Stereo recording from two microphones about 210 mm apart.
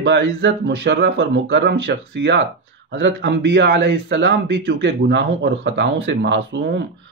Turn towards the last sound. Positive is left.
turn(degrees=-60)  # may be behind; listen again after turning